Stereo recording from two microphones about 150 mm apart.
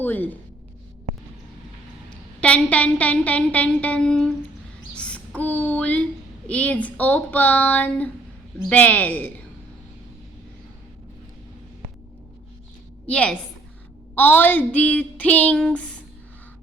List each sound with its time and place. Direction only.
0.0 s a woman's voice: 15° left (ahead or behind)
2.4 s a woman's voice: 10° left (ahead or behind)
13.1 s a woman's voice: 5° left (ahead or behind)